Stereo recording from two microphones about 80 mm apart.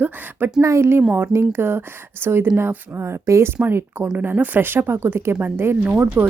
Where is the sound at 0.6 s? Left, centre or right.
Right.